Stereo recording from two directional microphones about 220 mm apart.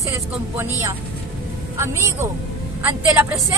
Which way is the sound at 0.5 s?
10° right (ahead or behind).